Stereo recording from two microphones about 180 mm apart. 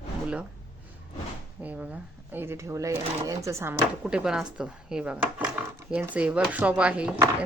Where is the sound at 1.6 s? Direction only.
10° right (ahead or behind).